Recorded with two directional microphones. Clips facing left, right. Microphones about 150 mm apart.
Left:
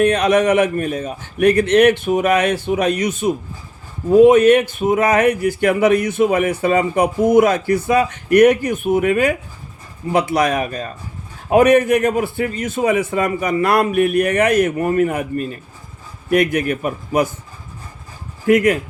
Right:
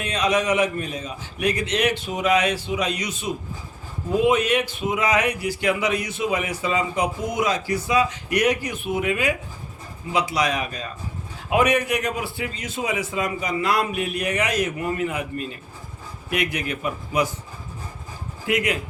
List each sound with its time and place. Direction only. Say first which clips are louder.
0.0 s a man's voice: left 9 dB; 55° left (ahead or behind)
18.4 s speech: left 10 dB; 50° left (ahead or behind)